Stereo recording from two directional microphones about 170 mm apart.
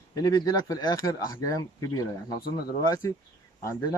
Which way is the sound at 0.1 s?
20° left (ahead or behind).